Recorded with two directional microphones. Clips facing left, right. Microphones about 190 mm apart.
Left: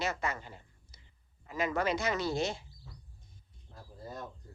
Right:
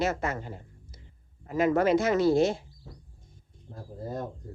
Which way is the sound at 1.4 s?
50° right (ahead or behind).